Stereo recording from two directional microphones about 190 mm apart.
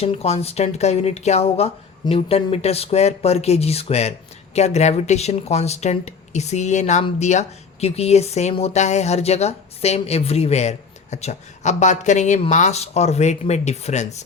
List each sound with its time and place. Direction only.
0.0 s speech: 30° left (ahead or behind)